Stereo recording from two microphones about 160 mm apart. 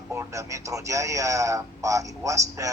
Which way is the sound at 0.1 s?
20° right (ahead or behind).